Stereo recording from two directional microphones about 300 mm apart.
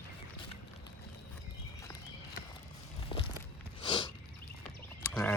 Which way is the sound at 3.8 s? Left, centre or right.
Centre.